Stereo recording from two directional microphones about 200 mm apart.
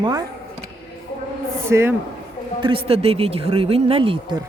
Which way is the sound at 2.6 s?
30° right (ahead or behind).